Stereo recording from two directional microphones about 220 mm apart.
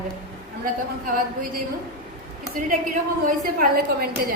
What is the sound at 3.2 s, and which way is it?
A woman's voice, 40° right (ahead or behind).